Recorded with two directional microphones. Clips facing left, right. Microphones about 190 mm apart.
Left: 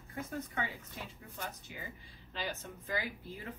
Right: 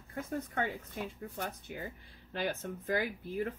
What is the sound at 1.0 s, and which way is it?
Speech, 55° right (ahead or behind).